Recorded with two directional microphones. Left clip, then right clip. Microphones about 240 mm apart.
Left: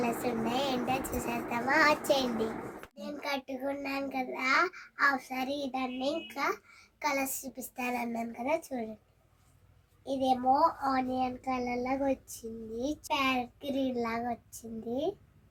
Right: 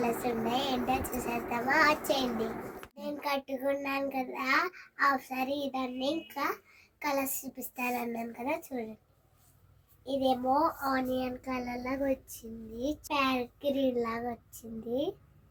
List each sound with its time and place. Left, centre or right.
0.0 s child singing: centre
10.0 s child singing: centre